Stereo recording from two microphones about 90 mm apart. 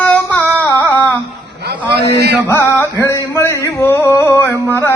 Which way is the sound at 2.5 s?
30° left (ahead or behind).